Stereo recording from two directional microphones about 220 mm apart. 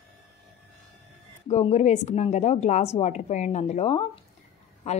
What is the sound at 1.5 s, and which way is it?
A woman's voice, 30° left (ahead or behind).